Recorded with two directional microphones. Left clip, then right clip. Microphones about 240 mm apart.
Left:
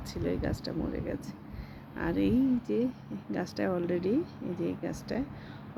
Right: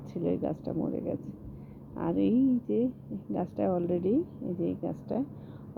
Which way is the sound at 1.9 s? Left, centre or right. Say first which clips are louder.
Right 1 dB; centre.